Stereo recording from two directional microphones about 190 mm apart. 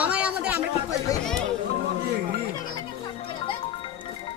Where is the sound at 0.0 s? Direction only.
5° right (ahead or behind).